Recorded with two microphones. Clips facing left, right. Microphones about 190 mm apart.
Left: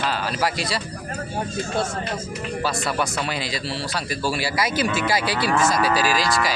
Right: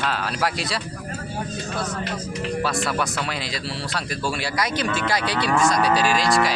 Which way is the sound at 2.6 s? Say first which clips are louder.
Left 2 dB; centre (ahead or behind).